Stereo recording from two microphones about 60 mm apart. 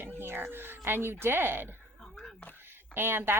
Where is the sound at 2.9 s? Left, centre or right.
Right.